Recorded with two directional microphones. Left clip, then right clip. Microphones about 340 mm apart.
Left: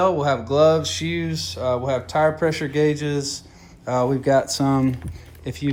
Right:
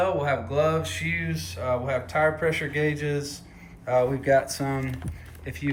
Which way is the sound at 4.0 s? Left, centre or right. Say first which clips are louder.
Left 3 dB; left.